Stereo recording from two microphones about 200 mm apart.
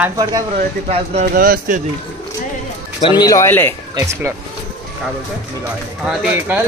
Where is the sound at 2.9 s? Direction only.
25° left (ahead or behind).